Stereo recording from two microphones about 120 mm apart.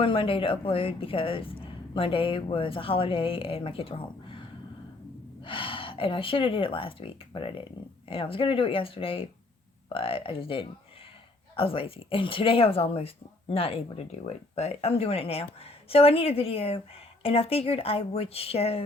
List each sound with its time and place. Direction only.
0.0 s speech: 50° left (ahead or behind)